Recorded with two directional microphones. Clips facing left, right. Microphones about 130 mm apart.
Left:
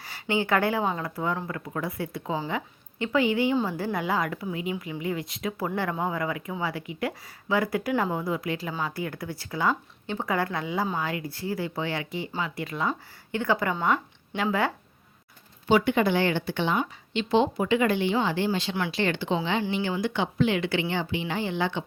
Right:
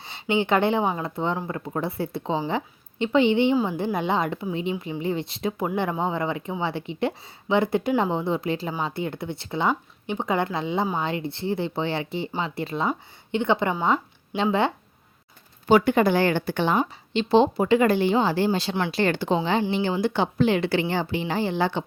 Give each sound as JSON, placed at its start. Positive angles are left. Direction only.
{"t": 0.0, "sound": "a woman's voice", "side_deg": -20}
{"t": 15.6, "sound": "a woman's voice", "side_deg": -45}